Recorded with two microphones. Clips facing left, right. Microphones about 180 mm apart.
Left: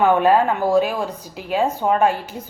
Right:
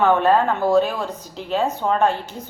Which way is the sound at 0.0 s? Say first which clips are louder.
Left 1 dB; 10° left (ahead or behind).